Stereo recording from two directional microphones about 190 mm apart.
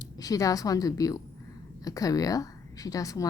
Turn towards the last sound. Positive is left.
turn(degrees=20)  # may be behind; listen again after turning